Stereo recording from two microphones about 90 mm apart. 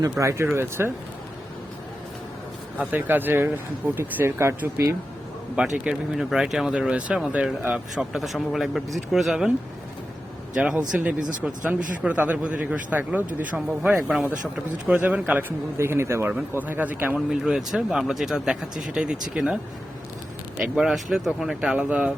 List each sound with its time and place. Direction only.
0.0 s speech: 35° right (ahead or behind)
2.7 s speech: 20° right (ahead or behind)
5.5 s speech: 10° right (ahead or behind)
8.1 s speech: centre (ahead or behind)
10.5 s speech: 10° right (ahead or behind)
14.9 s speech: 20° right (ahead or behind)
16.3 s speech: 20° right (ahead or behind)
17.2 s speech: 5° right (ahead or behind)
20.6 s speech: 5° right (ahead or behind)